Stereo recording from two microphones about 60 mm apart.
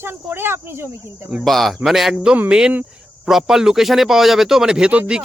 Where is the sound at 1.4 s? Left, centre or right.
Centre.